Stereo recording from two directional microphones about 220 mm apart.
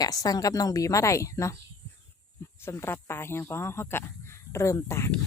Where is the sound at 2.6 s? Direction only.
10° left (ahead or behind).